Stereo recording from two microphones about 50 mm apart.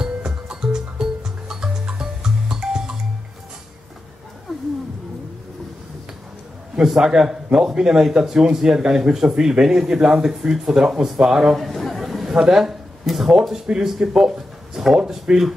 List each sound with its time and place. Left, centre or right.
0.0 s music: centre
6.8 s speech: centre
11.5 s chatter: centre
12.4 s speech: centre